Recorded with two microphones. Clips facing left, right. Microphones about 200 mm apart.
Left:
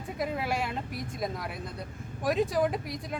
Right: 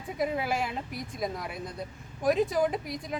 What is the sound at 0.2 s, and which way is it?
A woman's voice, centre (ahead or behind).